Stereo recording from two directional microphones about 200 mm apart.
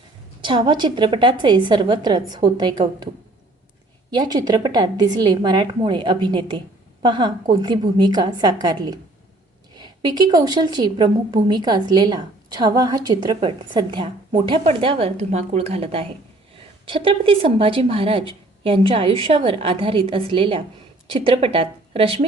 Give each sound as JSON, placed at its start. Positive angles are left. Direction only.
{"t": 0.4, "sound": "a woman's voice", "side_deg": -25}
{"t": 4.1, "sound": "a woman's voice", "side_deg": -20}